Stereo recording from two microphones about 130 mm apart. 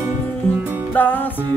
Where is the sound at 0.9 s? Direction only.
15° left (ahead or behind).